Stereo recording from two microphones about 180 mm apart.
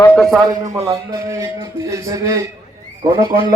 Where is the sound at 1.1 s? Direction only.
15° right (ahead or behind).